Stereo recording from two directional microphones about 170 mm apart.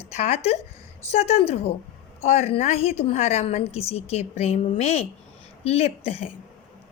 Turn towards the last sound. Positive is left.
turn(degrees=35)  # may be behind; listen again after turning